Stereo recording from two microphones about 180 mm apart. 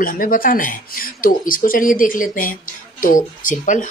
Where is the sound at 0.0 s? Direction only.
50° left (ahead or behind).